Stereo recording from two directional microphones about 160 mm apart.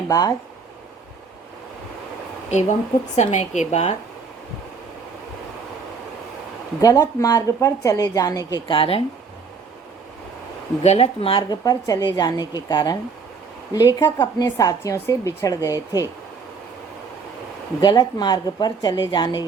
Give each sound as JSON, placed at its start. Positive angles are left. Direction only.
{"t": 0.1, "sound": "a woman's voice", "side_deg": 20}
{"t": 2.5, "sound": "a woman's voice", "side_deg": 45}
{"t": 6.8, "sound": "a woman's voice", "side_deg": 20}
{"t": 10.8, "sound": "a woman's voice", "side_deg": 40}
{"t": 17.7, "sound": "a woman's voice", "side_deg": 30}